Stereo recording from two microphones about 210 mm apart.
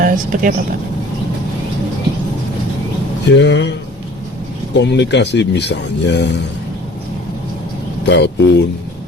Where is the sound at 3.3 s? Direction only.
55° left (ahead or behind).